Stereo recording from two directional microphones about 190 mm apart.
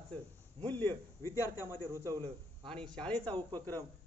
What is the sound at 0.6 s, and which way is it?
A man's voice, 10° left (ahead or behind).